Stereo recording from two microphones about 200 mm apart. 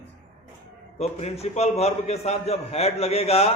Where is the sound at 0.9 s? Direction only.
30° left (ahead or behind).